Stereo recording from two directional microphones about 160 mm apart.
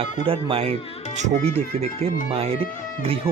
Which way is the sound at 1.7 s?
40° right (ahead or behind).